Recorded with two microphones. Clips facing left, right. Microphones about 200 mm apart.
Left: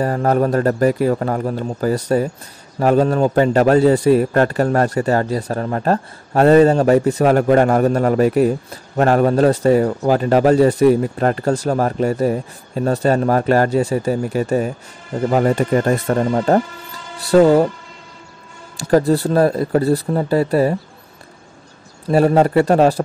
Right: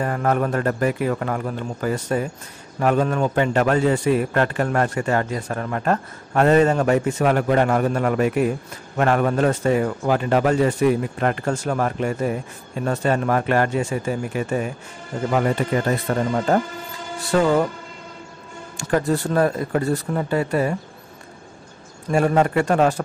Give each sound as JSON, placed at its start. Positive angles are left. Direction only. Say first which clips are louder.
{"t": 0.0, "sound": "a man's voice", "louder": "left 5 dB", "side_deg": 35}
{"t": 18.8, "sound": "a man's voice", "louder": "left 6 dB", "side_deg": 35}
{"t": 22.0, "sound": "a man's voice", "louder": "left 5 dB", "side_deg": 35}